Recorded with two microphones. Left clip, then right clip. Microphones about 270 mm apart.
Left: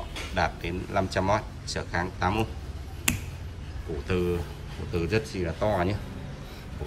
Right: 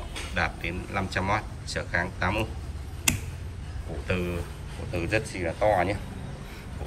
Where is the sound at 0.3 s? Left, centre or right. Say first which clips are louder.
Left 1 dB; centre.